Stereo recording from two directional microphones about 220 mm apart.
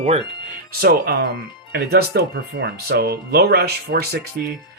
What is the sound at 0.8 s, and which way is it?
Speech, 45° right (ahead or behind).